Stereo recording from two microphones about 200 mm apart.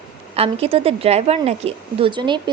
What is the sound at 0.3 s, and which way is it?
A woman's voice, 30° right (ahead or behind).